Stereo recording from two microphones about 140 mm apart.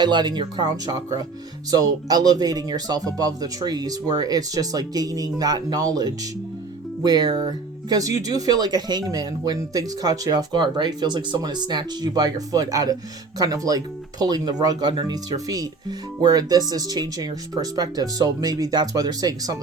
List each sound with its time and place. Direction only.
0.0 s speech: 30° right (ahead or behind)